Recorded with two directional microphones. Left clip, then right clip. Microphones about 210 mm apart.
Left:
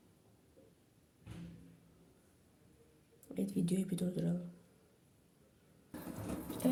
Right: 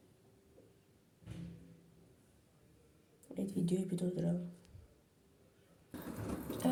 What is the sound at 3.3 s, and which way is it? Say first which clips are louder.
Speech: even; 15° left (ahead or behind).